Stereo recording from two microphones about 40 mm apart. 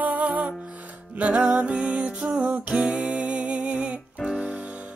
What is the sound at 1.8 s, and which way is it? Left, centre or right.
Music, right.